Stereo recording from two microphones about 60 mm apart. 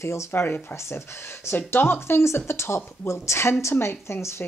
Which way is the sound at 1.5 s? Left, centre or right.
Left.